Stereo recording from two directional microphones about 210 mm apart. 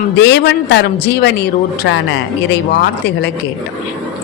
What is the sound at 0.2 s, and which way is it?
A man's voice, 50° left (ahead or behind).